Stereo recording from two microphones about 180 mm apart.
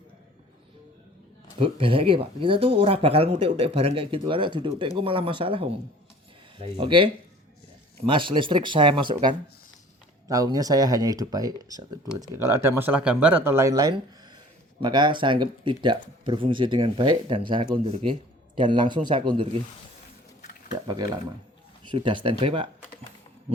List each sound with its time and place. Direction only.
1.5 s speech: 30° right (ahead or behind)
21.8 s speech: 25° right (ahead or behind)